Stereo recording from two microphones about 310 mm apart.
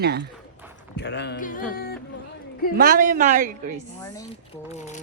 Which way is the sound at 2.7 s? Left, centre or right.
Right.